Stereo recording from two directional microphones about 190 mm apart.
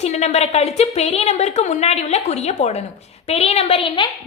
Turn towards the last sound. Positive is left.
turn(degrees=30)  # may be behind; listen again after turning